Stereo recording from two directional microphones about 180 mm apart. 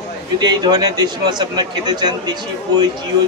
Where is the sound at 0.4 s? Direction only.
25° right (ahead or behind).